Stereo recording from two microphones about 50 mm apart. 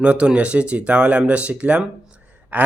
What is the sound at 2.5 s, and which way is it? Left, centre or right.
Gasp, right.